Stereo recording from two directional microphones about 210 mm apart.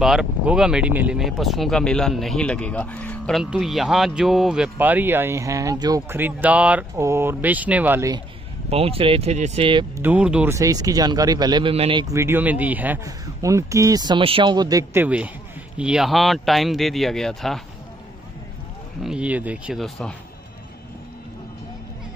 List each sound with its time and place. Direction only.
0.0 s speech: centre (ahead or behind)
8.6 s speech: 30° right (ahead or behind)
10.0 s speech: 5° right (ahead or behind)
19.0 s speech: 5° right (ahead or behind)